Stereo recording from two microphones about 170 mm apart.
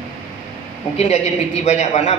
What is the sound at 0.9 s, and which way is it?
A man's voice, 40° left (ahead or behind).